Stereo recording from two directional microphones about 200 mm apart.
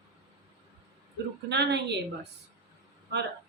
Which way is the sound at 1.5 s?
55° right (ahead or behind).